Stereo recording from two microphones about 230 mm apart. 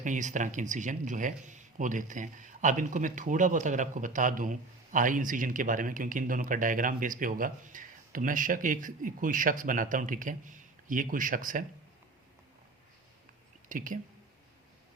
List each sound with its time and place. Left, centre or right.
0.0 s speech: right
13.7 s speech: right